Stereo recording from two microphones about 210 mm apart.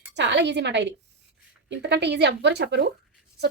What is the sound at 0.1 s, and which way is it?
A woman's voice, 55° right (ahead or behind).